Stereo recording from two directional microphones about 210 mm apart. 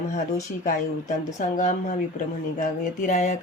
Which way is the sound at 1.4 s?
35° left (ahead or behind).